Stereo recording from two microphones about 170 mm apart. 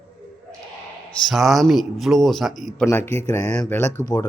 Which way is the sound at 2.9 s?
15° left (ahead or behind).